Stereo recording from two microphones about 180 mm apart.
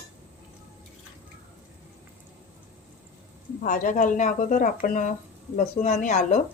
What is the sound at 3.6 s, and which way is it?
Speech, 50° left (ahead or behind).